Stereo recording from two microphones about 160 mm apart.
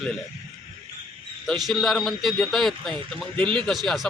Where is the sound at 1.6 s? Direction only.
Centre (ahead or behind).